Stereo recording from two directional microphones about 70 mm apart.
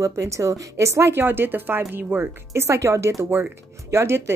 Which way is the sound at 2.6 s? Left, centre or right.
Right.